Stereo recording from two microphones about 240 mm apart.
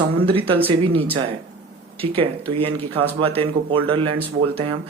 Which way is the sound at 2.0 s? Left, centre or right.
Right.